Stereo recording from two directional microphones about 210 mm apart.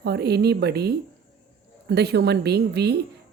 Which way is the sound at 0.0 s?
50° right (ahead or behind).